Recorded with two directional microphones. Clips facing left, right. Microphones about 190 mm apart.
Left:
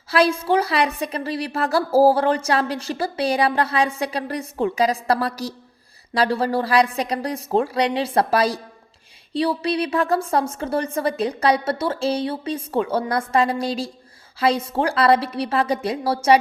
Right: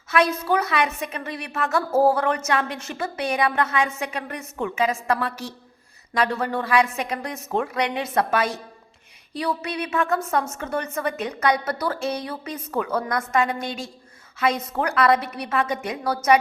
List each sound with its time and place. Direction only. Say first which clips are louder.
0.1 s a woman's voice: left 3 dB; 30° left (ahead or behind)